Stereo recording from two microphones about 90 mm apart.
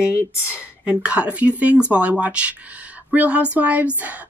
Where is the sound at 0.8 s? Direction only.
10° right (ahead or behind).